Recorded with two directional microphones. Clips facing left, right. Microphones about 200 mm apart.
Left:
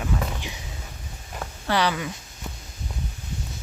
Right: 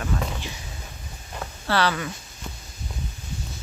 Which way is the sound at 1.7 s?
15° left (ahead or behind).